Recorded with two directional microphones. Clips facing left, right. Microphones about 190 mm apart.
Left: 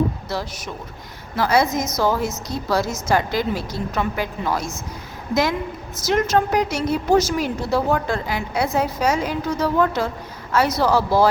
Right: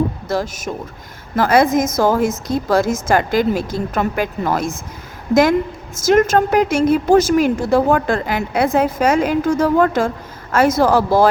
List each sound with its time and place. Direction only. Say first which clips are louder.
0.3 s a woman's voice: right 7 dB; 45° right (ahead or behind)